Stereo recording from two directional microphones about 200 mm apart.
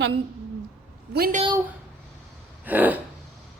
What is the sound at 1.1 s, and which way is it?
Speech, 50° right (ahead or behind).